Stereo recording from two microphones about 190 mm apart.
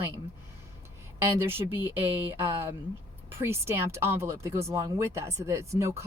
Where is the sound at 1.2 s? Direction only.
10° right (ahead or behind).